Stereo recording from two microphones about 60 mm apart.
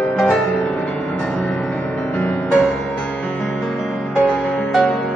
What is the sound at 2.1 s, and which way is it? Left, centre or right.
Music, left.